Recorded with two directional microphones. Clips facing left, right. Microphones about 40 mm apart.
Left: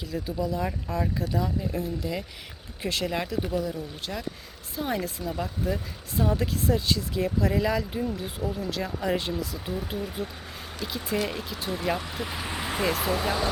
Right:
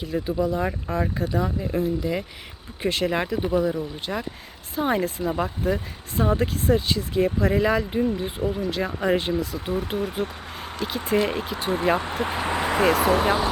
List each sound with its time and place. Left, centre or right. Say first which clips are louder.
0.0 s speech: right 6 dB; right
5.3 s speech: right 3 dB; right